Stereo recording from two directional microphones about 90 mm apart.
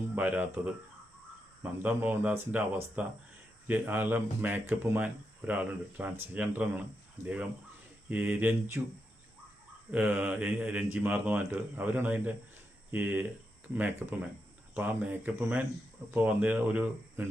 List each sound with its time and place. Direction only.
0.2 s speech: 20° right (ahead or behind)
1.8 s speech: 20° right (ahead or behind)
8.1 s speech: 15° right (ahead or behind)
9.9 s speech: 15° right (ahead or behind)